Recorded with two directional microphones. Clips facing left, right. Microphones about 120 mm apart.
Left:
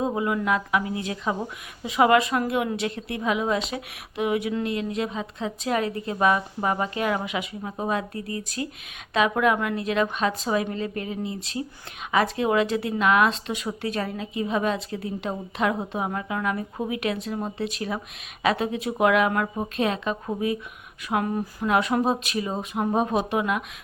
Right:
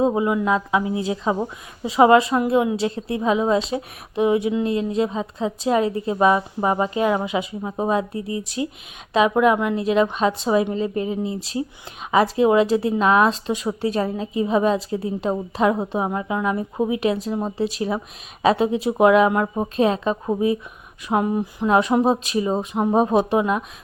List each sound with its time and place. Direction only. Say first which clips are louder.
0.0 s a woman's voice: right 6 dB; 25° right (ahead or behind)